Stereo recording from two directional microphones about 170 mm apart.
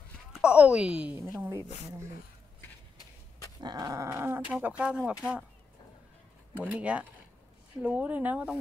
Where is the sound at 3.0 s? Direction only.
20° left (ahead or behind).